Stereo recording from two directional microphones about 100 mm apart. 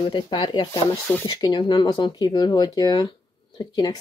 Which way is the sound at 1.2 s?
45° left (ahead or behind).